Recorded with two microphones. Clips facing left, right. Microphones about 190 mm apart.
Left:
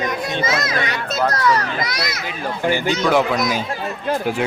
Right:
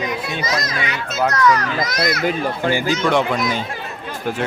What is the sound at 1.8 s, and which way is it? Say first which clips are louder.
Speech: right 5 dB; 45° right (ahead or behind).